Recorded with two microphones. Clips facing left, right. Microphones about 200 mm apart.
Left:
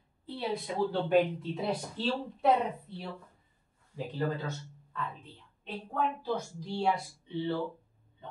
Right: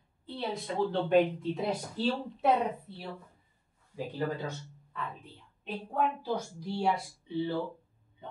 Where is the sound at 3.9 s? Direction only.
10° right (ahead or behind).